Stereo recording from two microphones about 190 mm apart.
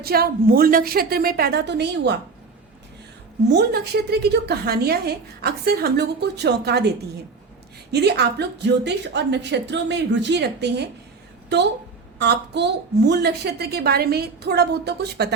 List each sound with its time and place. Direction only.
0.0 s a woman's voice: 55° right (ahead or behind)
3.5 s a woman's voice: 60° right (ahead or behind)
7.9 s a woman's voice: 60° right (ahead or behind)